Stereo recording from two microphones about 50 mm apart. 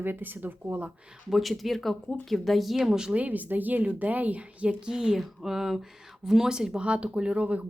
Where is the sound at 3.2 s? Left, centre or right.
Right.